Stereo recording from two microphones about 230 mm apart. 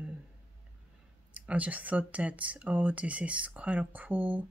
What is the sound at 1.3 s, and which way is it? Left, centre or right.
Speech, centre.